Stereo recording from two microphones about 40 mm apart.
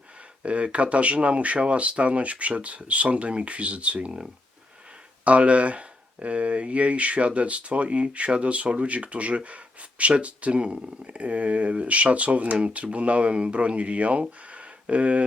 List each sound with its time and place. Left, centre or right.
0.4 s speech: right
5.2 s speech: right